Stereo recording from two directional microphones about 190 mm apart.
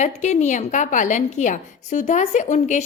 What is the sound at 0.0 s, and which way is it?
A woman's voice, 40° left (ahead or behind).